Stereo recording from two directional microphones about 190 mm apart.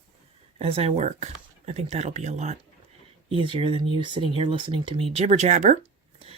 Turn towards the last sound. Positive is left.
turn(degrees=-40)  # may be behind; listen again after turning